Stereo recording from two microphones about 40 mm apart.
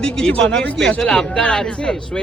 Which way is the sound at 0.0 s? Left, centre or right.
Left.